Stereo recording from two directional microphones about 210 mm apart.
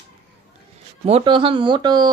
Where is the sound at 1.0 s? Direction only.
25° right (ahead or behind).